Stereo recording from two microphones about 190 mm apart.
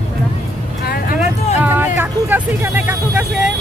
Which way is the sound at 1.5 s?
10° right (ahead or behind).